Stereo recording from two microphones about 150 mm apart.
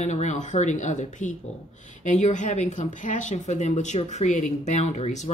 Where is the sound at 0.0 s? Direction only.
50° left (ahead or behind).